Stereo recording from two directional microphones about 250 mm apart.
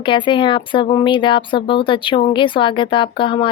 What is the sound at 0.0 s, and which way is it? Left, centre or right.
Speech, centre.